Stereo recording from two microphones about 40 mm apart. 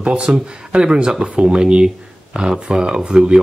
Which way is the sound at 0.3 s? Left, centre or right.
Right.